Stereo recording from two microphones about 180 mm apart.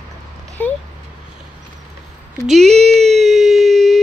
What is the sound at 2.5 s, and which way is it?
Speech, centre (ahead or behind).